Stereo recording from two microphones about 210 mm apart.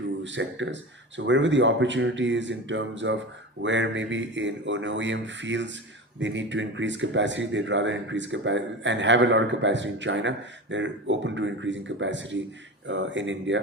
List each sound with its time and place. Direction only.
0.2 s speech: 60° right (ahead or behind)